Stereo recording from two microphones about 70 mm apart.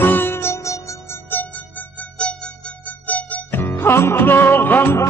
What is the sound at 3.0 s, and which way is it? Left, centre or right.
Music, left.